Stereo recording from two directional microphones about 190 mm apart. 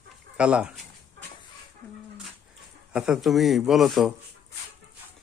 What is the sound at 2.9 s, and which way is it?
A man's voice, 5° right (ahead or behind).